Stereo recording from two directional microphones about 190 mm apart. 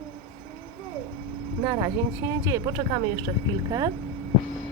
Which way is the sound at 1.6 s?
15° right (ahead or behind).